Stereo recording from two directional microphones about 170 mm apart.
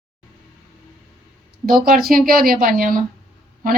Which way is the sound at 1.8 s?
60° right (ahead or behind).